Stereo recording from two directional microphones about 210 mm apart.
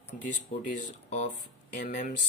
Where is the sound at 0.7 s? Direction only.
35° left (ahead or behind).